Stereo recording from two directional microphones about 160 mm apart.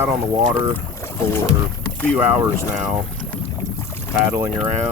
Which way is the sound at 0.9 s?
15° left (ahead or behind).